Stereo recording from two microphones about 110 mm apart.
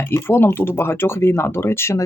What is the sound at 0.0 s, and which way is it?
Speech, 20° left (ahead or behind).